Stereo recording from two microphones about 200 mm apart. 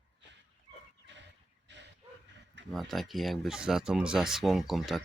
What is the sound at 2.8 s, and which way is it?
Speech, centre (ahead or behind).